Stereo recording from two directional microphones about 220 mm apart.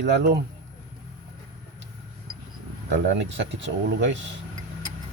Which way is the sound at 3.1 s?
55° right (ahead or behind).